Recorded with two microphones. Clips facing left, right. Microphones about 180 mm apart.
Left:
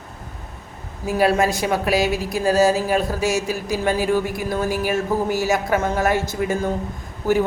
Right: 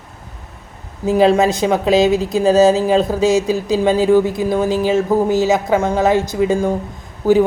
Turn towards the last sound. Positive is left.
turn(degrees=-15)  # may be behind; listen again after turning